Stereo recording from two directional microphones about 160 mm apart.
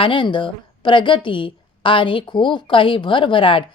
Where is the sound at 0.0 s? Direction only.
30° left (ahead or behind).